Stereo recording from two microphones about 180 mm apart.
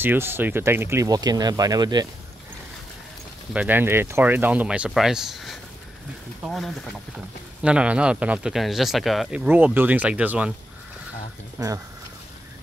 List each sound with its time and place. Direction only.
0.0 s speech: 10° right (ahead or behind)
3.5 s speech: 10° right (ahead or behind)
11.6 s speech: 20° right (ahead or behind)